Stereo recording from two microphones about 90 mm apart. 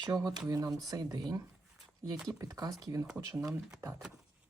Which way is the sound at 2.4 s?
40° right (ahead or behind).